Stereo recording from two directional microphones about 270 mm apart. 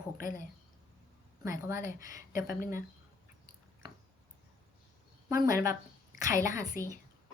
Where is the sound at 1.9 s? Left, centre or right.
Centre.